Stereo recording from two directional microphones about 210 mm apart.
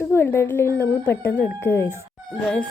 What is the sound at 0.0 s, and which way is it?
Speech, 10° left (ahead or behind).